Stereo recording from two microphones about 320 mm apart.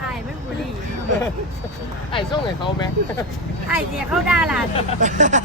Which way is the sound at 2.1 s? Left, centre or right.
Centre.